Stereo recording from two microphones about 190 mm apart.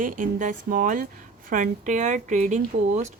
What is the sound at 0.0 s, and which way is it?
A woman's voice, 45° right (ahead or behind).